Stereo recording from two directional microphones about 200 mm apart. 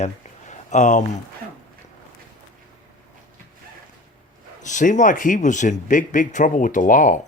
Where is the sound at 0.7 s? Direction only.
35° left (ahead or behind).